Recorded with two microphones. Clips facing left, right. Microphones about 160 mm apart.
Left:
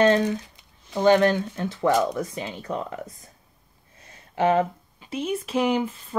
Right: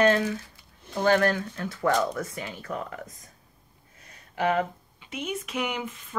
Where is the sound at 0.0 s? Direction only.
30° left (ahead or behind).